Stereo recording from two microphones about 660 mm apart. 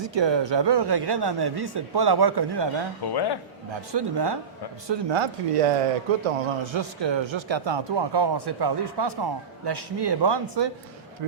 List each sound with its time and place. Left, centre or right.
0.0 s speech: right
3.1 s a man's voice: left
3.7 s speech: right